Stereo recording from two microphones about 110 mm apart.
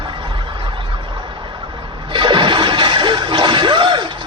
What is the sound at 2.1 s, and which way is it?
Music, 45° right (ahead or behind).